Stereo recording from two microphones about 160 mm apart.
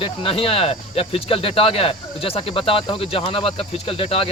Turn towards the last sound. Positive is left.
turn(degrees=35)  # may be behind; listen again after turning